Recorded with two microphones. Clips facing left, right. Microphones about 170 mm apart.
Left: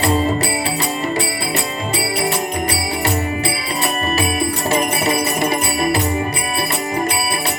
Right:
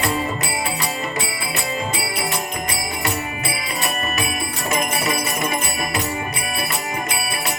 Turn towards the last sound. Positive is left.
turn(degrees=35)  # may be behind; listen again after turning